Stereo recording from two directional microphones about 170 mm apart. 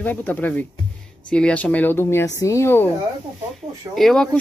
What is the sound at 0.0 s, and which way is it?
Speech, 10° left (ahead or behind).